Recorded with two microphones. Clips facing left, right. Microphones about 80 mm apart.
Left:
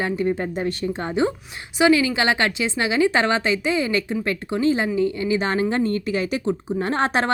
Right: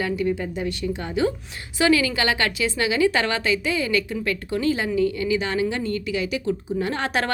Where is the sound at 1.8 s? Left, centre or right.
Centre.